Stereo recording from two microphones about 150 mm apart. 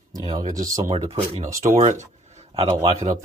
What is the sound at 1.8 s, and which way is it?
Speech, 55° right (ahead or behind).